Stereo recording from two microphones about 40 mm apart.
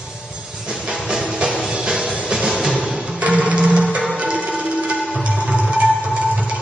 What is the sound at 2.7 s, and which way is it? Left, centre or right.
Music, right.